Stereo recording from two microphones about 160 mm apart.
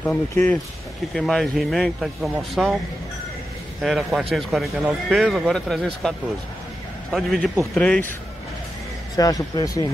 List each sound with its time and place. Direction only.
0.0 s a man's voice: 10° left (ahead or behind)
3.8 s a man's voice: centre (ahead or behind)
9.1 s a man's voice: 25° left (ahead or behind)